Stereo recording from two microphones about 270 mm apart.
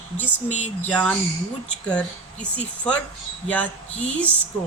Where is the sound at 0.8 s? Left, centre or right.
Centre.